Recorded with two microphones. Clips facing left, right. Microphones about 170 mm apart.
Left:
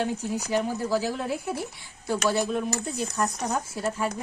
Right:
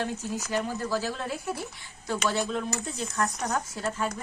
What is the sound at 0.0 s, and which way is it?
Speech, 15° left (ahead or behind).